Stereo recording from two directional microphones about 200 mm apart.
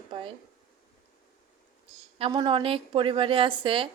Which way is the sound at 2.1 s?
25° right (ahead or behind).